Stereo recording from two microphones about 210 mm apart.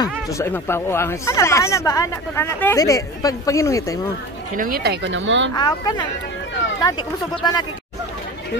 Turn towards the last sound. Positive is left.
turn(degrees=20)  # may be behind; listen again after turning